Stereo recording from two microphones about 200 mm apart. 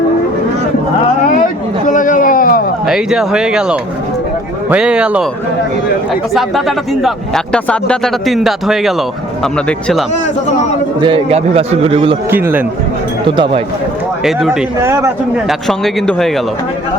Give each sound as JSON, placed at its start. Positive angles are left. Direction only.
{"t": 1.9, "sound": "a sound", "side_deg": 40}
{"t": 2.8, "sound": "speech", "side_deg": -5}
{"t": 6.3, "sound": "speech", "side_deg": 0}
{"t": 11.0, "sound": "a man's voice", "side_deg": -30}
{"t": 12.3, "sound": "speech", "side_deg": -10}
{"t": 13.2, "sound": "a man's voice", "side_deg": -25}
{"t": 14.3, "sound": "speech", "side_deg": 0}
{"t": 14.8, "sound": "speech", "side_deg": -15}
{"t": 15.4, "sound": "speech", "side_deg": 0}